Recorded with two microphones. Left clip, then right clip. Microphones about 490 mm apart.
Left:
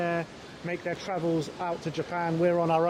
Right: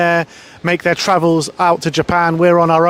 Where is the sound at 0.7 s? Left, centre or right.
Right.